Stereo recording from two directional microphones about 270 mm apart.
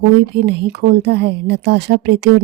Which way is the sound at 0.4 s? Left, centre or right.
Right.